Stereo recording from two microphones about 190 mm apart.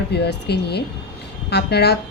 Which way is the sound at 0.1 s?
60° left (ahead or behind).